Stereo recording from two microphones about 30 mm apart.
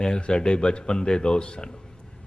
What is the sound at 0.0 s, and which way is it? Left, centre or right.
A man's voice, left.